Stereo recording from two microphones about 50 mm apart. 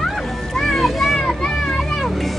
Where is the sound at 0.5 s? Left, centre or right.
Centre.